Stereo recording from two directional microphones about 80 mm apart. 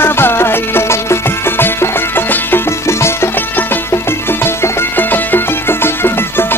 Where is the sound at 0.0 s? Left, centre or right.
Left.